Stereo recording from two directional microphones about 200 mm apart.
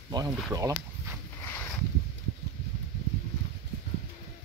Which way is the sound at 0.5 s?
15° right (ahead or behind).